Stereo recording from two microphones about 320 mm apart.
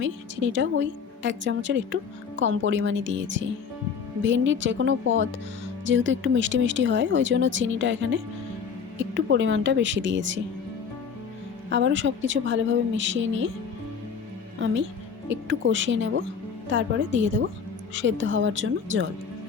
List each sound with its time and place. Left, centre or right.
0.0 s a woman's voice: right
9.1 s a woman's voice: right
11.7 s a woman's voice: right
15.3 s a woman's voice: right